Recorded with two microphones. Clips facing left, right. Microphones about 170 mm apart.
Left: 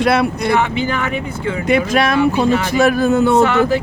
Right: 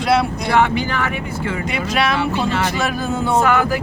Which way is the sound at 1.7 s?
50° left (ahead or behind).